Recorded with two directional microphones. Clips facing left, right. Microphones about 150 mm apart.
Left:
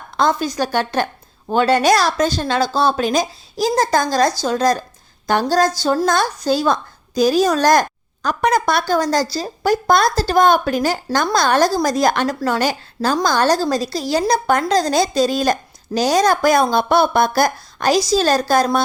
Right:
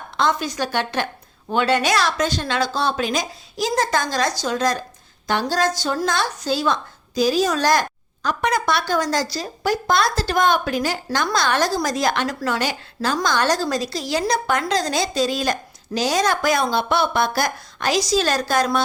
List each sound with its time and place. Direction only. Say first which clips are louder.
0.2 s a woman's voice: left 4 dB; 35° left (ahead or behind)